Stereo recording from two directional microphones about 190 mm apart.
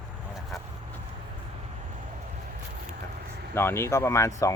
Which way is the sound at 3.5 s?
10° left (ahead or behind).